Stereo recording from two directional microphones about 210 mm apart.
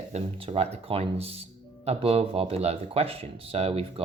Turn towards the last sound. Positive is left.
turn(degrees=-30)  # may be behind; listen again after turning